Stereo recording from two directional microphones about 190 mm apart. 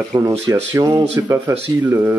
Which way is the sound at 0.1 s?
20° right (ahead or behind).